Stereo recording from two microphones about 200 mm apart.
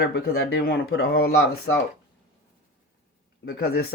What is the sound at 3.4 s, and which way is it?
Speech, 50° left (ahead or behind).